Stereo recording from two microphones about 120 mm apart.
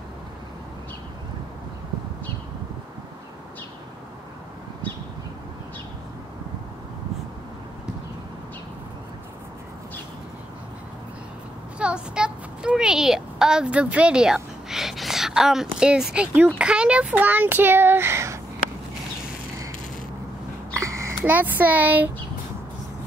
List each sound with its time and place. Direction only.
11.8 s a sound: 5° right (ahead or behind)
16.5 s speech: 10° right (ahead or behind)
20.7 s babbling: 25° right (ahead or behind)
21.2 s speech: 15° right (ahead or behind)